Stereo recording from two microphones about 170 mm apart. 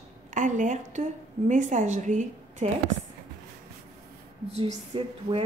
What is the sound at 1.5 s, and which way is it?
A woman's voice, 45° right (ahead or behind).